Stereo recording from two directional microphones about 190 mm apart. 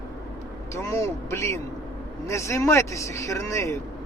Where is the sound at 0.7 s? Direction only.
15° left (ahead or behind).